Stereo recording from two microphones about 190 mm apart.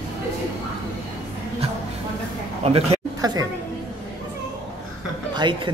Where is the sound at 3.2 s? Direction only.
20° right (ahead or behind).